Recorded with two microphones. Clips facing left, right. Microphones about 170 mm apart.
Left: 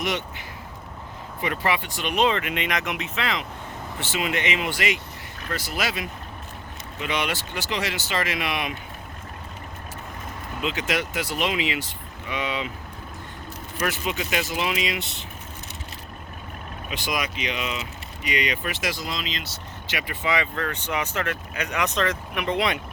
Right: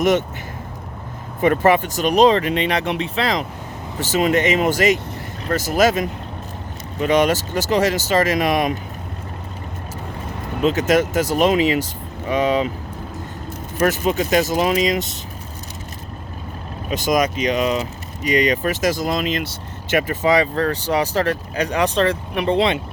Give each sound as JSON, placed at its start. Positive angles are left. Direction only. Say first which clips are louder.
{"t": 0.0, "sound": "speech", "louder": "right 11 dB", "side_deg": -45}
{"t": 1.4, "sound": "speech", "louder": "right 11 dB", "side_deg": -45}
{"t": 10.6, "sound": "speech", "louder": "right 10 dB", "side_deg": -40}
{"t": 13.7, "sound": "speech", "louder": "right 9 dB", "side_deg": -45}
{"t": 16.9, "sound": "speech", "louder": "right 11 dB", "side_deg": -45}